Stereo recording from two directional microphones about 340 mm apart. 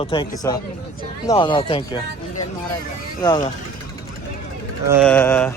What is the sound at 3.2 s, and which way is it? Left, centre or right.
Speech, centre.